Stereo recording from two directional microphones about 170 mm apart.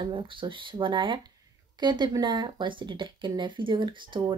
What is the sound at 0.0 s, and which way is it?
Speech, 30° right (ahead or behind).